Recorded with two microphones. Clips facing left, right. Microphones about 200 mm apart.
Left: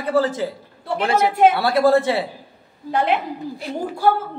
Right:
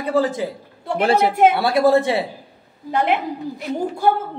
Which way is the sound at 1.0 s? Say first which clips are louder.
Right 1 dB; 30° right (ahead or behind).